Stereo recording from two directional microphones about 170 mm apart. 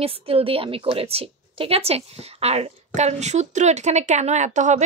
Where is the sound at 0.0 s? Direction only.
35° right (ahead or behind).